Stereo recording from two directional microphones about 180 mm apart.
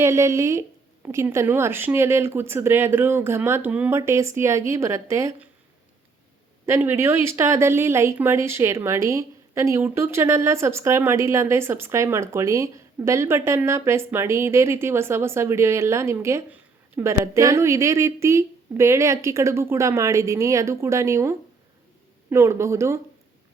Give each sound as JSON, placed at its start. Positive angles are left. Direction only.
{"t": 0.0, "sound": "speech", "side_deg": -15}
{"t": 6.7, "sound": "speech", "side_deg": -15}